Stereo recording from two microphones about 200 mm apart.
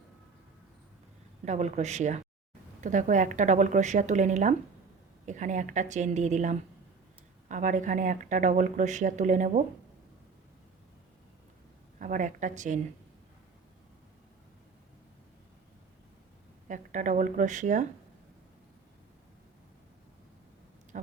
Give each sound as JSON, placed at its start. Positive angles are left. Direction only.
{"t": 1.5, "sound": "speech", "side_deg": -35}
{"t": 11.9, "sound": "speech", "side_deg": -40}
{"t": 16.6, "sound": "speech", "side_deg": -40}
{"t": 20.9, "sound": "a sound", "side_deg": -40}